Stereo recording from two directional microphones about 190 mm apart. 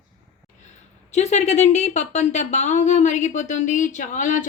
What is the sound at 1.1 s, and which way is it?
A woman's voice, 35° left (ahead or behind).